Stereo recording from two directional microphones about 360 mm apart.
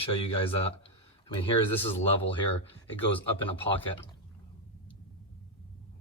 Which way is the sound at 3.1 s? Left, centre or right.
Centre.